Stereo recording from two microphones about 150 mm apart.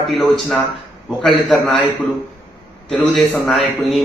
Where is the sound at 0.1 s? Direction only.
Centre (ahead or behind).